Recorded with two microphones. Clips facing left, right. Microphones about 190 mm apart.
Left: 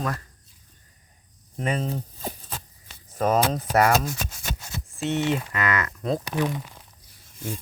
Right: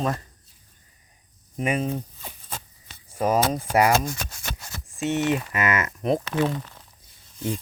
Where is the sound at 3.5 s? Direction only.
10° right (ahead or behind).